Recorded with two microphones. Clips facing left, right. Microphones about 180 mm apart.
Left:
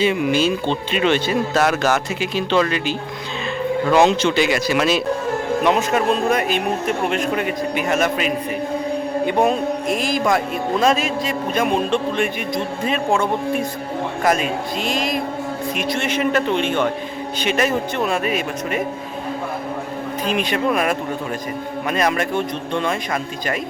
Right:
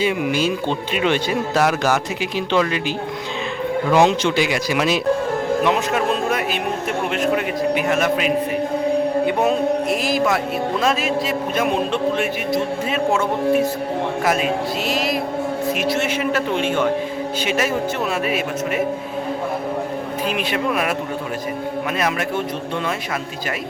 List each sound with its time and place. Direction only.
0.0 s speech: 10° right (ahead or behind)
5.6 s a man's voice: centre (ahead or behind)
20.2 s a man's voice: 5° right (ahead or behind)
21.9 s a man's voice: 5° right (ahead or behind)